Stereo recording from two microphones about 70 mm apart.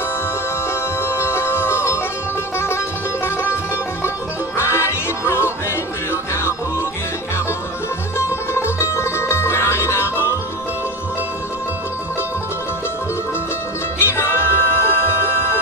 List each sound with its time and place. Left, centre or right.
1.0 s music: left
4.6 s music: left
8.2 s music: left
13.9 s music: left